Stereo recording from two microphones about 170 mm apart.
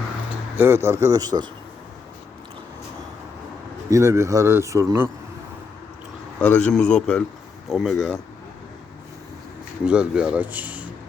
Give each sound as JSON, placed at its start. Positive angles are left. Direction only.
{"t": 0.5, "sound": "a man's voice", "side_deg": -15}
{"t": 3.8, "sound": "a man's voice", "side_deg": -15}
{"t": 6.4, "sound": "a man's voice", "side_deg": 10}
{"t": 9.8, "sound": "a man's voice", "side_deg": -5}